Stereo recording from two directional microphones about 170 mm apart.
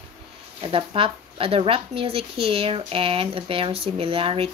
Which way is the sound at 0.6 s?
30° right (ahead or behind).